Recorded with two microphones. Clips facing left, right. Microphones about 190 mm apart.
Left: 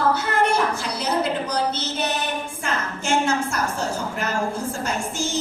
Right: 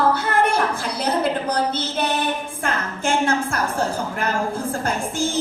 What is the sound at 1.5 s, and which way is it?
Speech, 55° right (ahead or behind).